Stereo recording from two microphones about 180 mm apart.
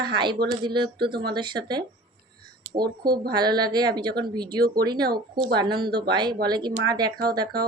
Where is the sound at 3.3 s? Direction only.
25° right (ahead or behind).